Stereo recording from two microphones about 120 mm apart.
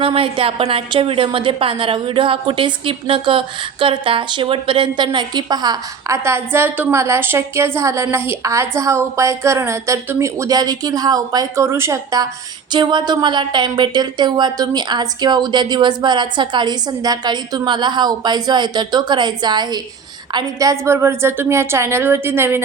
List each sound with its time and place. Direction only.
0.0 s a woman's voice: 50° right (ahead or behind); by 6.1 s 35° right (ahead or behind)
6.2 s speech: 20° right (ahead or behind)
12.7 s a woman's voice: 40° right (ahead or behind); by 22.6 s 20° right (ahead or behind)